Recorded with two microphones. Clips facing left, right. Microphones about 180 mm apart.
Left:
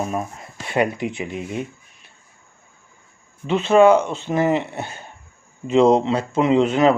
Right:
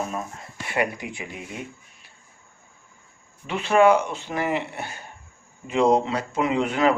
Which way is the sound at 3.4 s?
25° left (ahead or behind).